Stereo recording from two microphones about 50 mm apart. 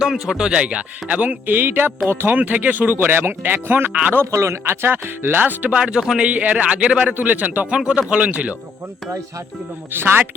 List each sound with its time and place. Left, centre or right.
0.0 s speech: centre; by 1.4 s right
1.5 s speech: right
4.3 s speech: right
4.6 s speech: right
5.7 s speech: centre
7.1 s speech: right
7.9 s speech: right
9.9 s speech: right